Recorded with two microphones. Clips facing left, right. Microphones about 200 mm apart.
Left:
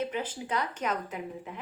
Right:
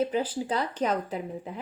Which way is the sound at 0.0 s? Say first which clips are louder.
Right 6 dB; 30° right (ahead or behind).